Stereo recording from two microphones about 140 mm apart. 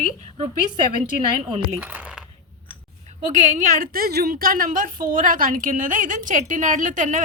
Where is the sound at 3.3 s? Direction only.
65° right (ahead or behind).